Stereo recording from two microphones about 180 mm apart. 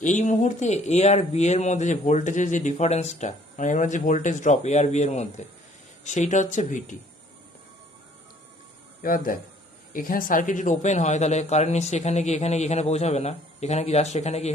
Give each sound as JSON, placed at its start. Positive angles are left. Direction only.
{"t": 0.0, "sound": "speech", "side_deg": 40}
{"t": 9.0, "sound": "speech", "side_deg": 50}